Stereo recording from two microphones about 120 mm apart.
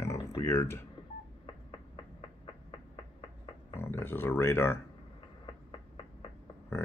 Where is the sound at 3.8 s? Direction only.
20° left (ahead or behind).